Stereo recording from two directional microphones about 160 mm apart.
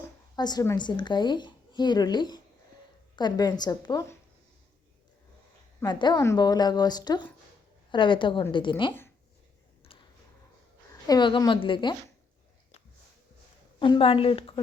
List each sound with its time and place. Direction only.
0.3 s speech: 25° left (ahead or behind)
5.8 s a woman's voice: 30° left (ahead or behind)
9.9 s a sound: 35° left (ahead or behind)
11.0 s speech: 25° left (ahead or behind)
13.7 s a woman's voice: 30° left (ahead or behind)